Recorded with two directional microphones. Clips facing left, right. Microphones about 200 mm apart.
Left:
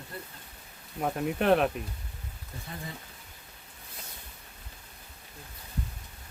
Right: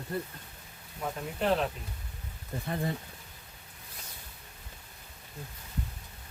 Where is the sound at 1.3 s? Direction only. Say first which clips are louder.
Left 4 dB; 65° left (ahead or behind).